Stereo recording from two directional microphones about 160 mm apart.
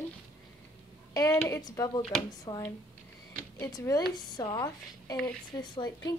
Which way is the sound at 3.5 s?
20° left (ahead or behind).